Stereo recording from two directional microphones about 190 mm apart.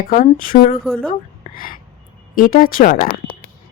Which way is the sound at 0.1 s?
45° left (ahead or behind).